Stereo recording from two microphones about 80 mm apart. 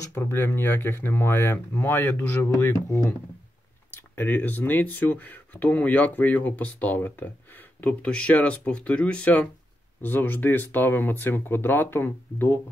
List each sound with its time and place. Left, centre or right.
0.1 s speech: left